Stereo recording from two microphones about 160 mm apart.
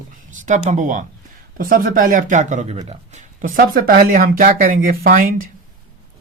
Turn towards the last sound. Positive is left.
turn(degrees=-60)  # may be behind; listen again after turning